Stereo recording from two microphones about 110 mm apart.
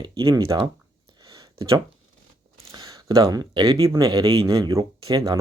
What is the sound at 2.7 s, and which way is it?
Speech, 30° right (ahead or behind).